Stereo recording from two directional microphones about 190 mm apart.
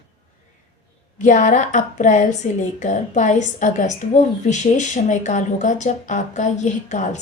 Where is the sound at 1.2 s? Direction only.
40° left (ahead or behind).